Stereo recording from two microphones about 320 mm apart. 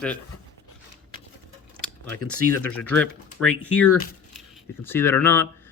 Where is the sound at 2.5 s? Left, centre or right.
Centre.